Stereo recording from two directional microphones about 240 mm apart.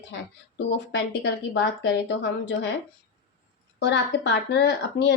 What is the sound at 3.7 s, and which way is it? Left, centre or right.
A woman's voice, left.